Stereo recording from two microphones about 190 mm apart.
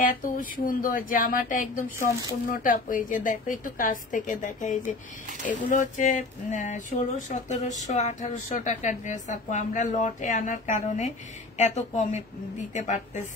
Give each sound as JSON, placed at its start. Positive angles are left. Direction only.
{"t": 0.0, "sound": "a woman's voice", "side_deg": 45}